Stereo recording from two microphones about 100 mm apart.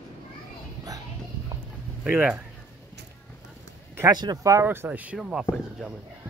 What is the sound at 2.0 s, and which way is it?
Speech, 10° right (ahead or behind).